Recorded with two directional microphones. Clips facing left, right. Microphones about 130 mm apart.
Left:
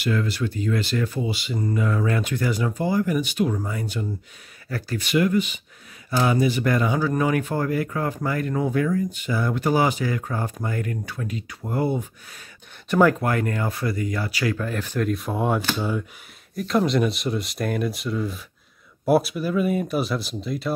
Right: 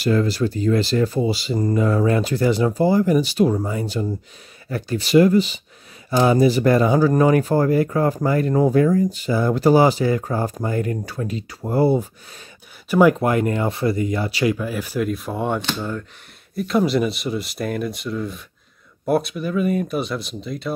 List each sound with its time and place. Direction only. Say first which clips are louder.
0.0 s speech: right 6 dB; 35° right (ahead or behind)
4.6 s speech: right 4 dB; 20° right (ahead or behind)
5.0 s speech: right 7 dB; 35° right (ahead or behind)
13.1 s speech: right 5 dB; 20° right (ahead or behind); by 20.7 s centre (ahead or behind)